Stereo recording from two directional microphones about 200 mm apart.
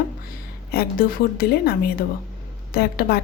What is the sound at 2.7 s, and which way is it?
Speech, 50° left (ahead or behind).